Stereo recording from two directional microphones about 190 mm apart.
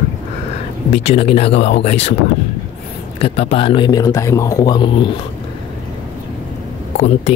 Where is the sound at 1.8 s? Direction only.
30° left (ahead or behind).